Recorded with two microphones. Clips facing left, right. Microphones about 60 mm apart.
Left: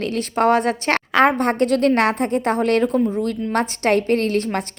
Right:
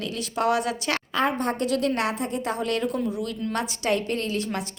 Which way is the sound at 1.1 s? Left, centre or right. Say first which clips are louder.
Left 10 dB; left.